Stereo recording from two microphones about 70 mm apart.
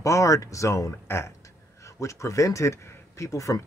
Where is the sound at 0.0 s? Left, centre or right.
Left.